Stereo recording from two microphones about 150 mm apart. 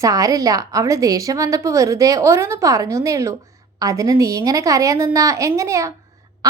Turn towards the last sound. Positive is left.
turn(degrees=-20)  # may be behind; listen again after turning